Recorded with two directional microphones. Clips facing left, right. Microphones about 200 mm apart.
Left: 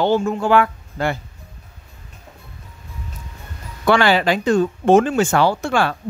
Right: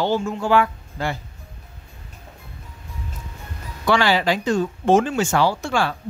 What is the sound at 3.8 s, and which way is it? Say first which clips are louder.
Speech: left 3 dB; 55° left (ahead or behind).